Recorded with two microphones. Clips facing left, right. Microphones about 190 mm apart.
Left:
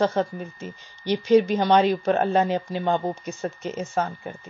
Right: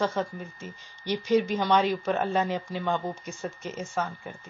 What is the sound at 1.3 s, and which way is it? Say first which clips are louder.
Speech: left 6 dB; 70° left (ahead or behind).